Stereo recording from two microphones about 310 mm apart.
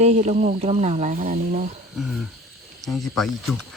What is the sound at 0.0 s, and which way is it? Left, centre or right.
Speech, right.